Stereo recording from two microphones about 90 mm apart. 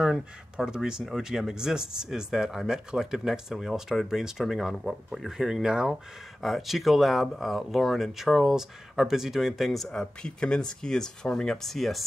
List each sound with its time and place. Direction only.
0.0 s speech: 5° right (ahead or behind)